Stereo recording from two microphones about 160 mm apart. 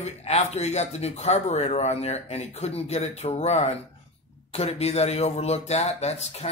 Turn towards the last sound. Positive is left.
turn(degrees=40)  # may be behind; listen again after turning